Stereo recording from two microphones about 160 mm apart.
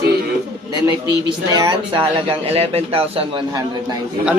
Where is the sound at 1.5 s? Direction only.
25° right (ahead or behind).